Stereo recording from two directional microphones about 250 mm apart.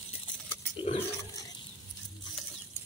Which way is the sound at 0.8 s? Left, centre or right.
Centre.